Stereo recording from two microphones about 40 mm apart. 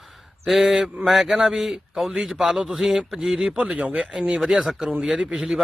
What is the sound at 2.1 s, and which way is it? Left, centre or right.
Mantra, centre.